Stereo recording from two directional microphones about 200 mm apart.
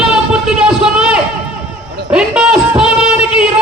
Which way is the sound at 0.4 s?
5° right (ahead or behind).